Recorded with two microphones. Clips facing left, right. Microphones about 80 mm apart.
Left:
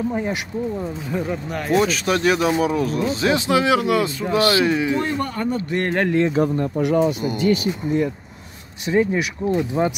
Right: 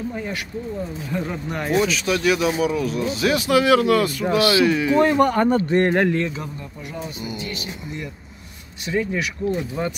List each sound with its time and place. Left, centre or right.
0.1 s speech: left
1.1 s speech: centre
1.8 s speech: left
5.2 s speech: right
5.7 s speech: right
6.2 s speech: left
7.2 s speech: left
8.8 s speech: left